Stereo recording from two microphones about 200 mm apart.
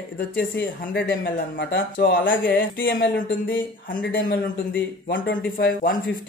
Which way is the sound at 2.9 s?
50° left (ahead or behind).